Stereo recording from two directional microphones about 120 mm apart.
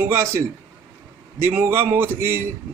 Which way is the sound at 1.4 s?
20° right (ahead or behind).